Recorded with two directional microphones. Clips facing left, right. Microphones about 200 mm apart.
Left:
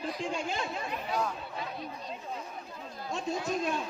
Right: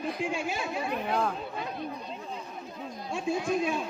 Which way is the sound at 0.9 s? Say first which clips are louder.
Right 6 dB; 55° right (ahead or behind).